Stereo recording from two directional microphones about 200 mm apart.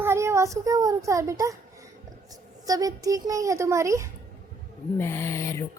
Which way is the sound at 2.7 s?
15° right (ahead or behind).